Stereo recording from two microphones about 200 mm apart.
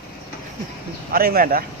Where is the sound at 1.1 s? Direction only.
45° right (ahead or behind).